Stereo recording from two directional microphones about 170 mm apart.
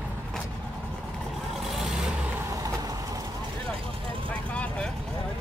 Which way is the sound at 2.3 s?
20° right (ahead or behind).